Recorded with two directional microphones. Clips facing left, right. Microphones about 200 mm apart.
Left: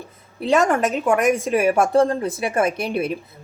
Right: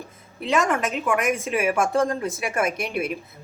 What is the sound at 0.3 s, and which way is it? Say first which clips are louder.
A woman's voice: left 5 dB; 40° left (ahead or behind).